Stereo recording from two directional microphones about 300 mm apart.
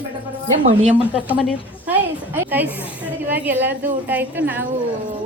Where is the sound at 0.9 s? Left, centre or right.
Centre.